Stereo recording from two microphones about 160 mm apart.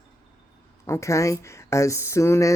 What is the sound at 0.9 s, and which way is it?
Speech, 20° left (ahead or behind).